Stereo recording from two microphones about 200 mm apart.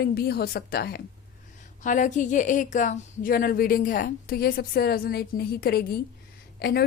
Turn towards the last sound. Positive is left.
turn(degrees=50)  # may be behind; listen again after turning